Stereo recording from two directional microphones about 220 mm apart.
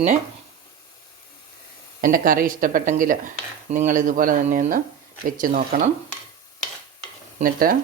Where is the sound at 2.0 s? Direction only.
40° right (ahead or behind).